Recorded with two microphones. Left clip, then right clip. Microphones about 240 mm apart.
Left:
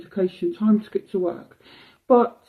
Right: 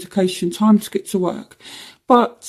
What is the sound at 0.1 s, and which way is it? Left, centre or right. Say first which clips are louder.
Speech: right 4 dB; right.